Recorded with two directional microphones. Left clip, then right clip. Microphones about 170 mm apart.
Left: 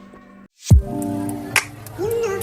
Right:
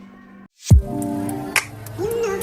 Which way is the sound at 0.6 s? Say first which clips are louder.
Even; centre (ahead or behind).